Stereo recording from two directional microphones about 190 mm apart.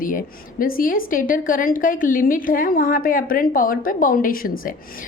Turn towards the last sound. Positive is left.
turn(degrees=50)  # may be behind; listen again after turning